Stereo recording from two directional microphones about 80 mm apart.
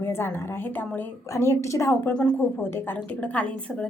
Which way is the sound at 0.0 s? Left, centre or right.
Left.